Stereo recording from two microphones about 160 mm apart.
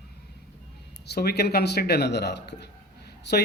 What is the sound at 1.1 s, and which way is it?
A man's voice, 80° left.